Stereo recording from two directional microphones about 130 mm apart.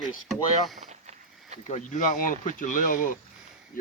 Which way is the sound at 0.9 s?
65° right (ahead or behind).